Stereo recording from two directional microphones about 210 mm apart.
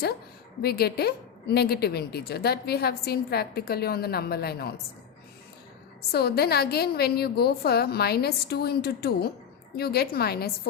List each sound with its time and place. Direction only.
0.6 s a woman's voice: 50° left (ahead or behind)
6.0 s a woman's voice: 50° left (ahead or behind)